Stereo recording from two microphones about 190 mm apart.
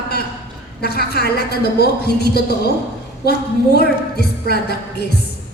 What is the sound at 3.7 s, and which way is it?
A woman's voice, 60° left (ahead or behind).